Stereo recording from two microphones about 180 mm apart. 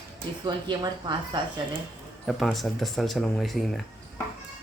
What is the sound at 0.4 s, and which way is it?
Speech, 25° right (ahead or behind).